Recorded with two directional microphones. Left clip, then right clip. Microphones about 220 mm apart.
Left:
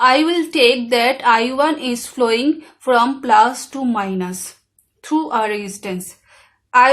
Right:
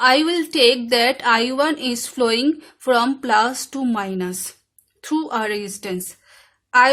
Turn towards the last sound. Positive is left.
turn(degrees=-40)  # may be behind; listen again after turning